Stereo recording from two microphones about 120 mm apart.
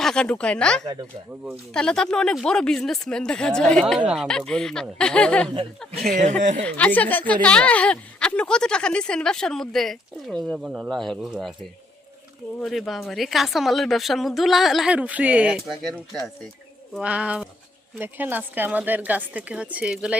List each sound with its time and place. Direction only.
0.0 s a woman's voice: 5° left (ahead or behind)
6.1 s speech: 85° right
6.6 s a woman's voice: 10° left (ahead or behind)
12.5 s speech: centre (ahead or behind)
17.0 s speech: 10° right (ahead or behind)